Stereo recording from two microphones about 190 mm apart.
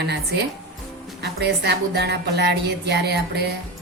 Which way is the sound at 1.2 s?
60° right (ahead or behind).